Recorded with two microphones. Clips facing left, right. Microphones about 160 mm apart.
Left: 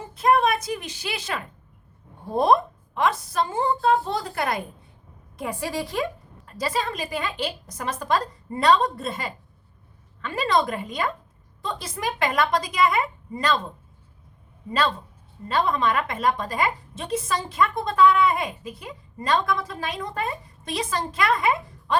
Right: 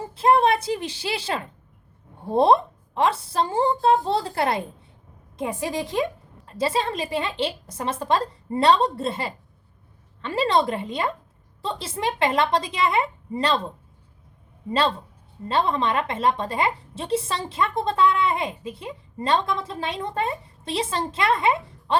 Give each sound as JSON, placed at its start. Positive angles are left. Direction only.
{"t": 0.0, "sound": "a woman's voice", "side_deg": -30}